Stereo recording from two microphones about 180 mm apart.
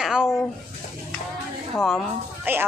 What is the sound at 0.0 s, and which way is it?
Speech, 5° right (ahead or behind).